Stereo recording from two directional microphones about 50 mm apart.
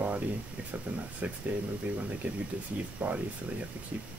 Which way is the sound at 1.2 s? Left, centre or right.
Right.